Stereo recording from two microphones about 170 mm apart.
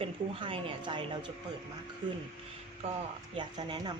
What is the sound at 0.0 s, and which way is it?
A woman's voice, 30° right (ahead or behind).